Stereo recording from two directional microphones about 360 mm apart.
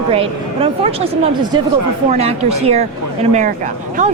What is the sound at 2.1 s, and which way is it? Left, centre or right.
A woman's voice, centre.